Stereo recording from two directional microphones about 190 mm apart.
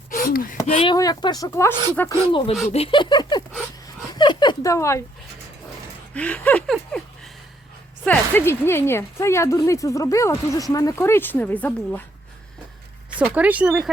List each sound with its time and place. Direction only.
0.1 s a sound: 50° left (ahead or behind)
0.6 s speech: 35° left (ahead or behind)
0.9 s speech: 20° left (ahead or behind)
1.7 s a woman's voice: 20° right (ahead or behind)
2.3 s speech: 35° left (ahead or behind); by 5.0 s 15° left (ahead or behind)
6.1 s speech: 5° left (ahead or behind)
8.0 s speech: 10° left (ahead or behind)
13.1 s speech: 5° right (ahead or behind)